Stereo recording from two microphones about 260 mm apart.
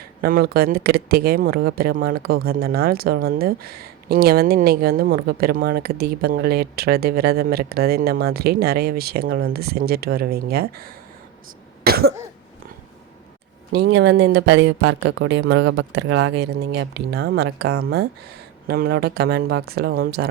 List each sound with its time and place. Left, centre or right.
0.2 s speech: right
11.8 s cough: right
13.7 s speech: right